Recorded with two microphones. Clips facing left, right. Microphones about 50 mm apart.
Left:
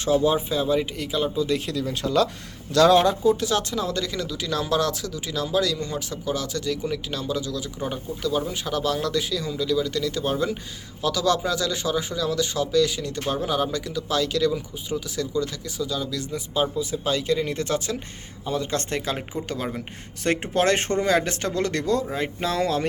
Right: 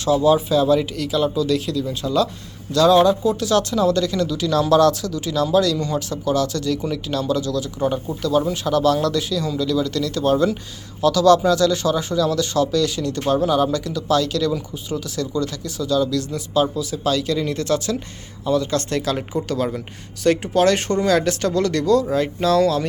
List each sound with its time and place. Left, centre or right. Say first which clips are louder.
0.0 s speech: right 4 dB; left
1.7 s speech: right 2 dB; left
3.2 s speech: right 3 dB; left
20.2 s speech: right 5 dB; left